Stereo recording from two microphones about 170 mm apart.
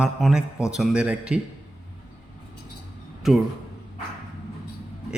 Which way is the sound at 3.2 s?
Centre (ahead or behind).